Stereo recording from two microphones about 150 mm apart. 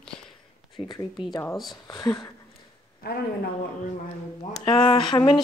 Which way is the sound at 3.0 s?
90° left.